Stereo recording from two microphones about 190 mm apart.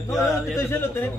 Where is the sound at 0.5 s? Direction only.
10° left (ahead or behind).